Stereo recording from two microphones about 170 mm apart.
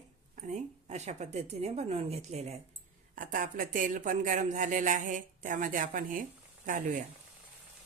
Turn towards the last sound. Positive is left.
turn(degrees=-50)  # may be behind; listen again after turning